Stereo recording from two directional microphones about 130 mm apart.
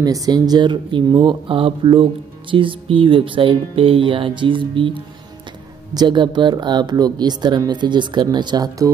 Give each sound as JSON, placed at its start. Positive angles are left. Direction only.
{"t": 0.0, "sound": "speech", "side_deg": -30}